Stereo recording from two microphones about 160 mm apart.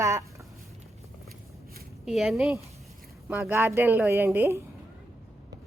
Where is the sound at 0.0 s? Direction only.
20° right (ahead or behind).